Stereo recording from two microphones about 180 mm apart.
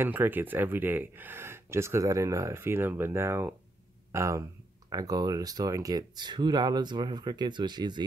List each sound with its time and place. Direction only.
0.0 s speech: 10° right (ahead or behind)